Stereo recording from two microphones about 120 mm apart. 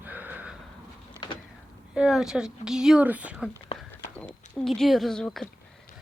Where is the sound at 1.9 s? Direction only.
5° right (ahead or behind).